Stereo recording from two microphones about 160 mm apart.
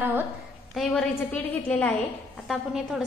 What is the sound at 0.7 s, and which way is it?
A man's voice, 5° left (ahead or behind).